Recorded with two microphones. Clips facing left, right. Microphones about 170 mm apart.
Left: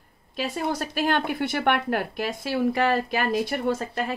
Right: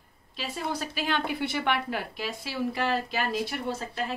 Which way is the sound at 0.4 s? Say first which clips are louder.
Left 5 dB; 50° left (ahead or behind).